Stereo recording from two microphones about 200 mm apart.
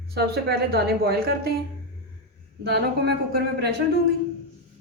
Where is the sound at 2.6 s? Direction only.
55° right (ahead or behind).